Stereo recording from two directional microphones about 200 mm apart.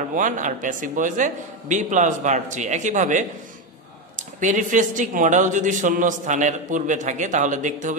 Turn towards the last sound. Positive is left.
turn(degrees=-40)  # may be behind; listen again after turning